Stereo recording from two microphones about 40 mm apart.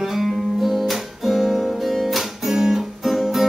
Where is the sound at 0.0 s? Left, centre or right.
Centre.